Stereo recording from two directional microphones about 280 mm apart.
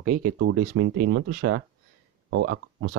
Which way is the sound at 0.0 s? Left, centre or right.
Right.